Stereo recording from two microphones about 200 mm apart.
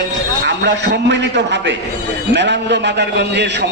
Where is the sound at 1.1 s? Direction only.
60° right (ahead or behind).